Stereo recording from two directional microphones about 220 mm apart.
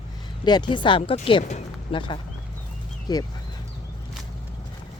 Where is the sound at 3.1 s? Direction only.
15° left (ahead or behind).